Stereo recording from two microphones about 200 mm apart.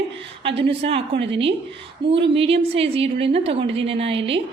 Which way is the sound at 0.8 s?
30° right (ahead or behind).